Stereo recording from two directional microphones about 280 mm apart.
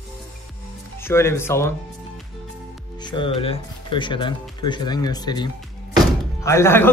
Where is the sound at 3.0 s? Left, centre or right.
Centre.